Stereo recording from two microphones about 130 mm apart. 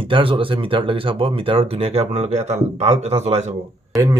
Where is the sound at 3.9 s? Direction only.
25° right (ahead or behind).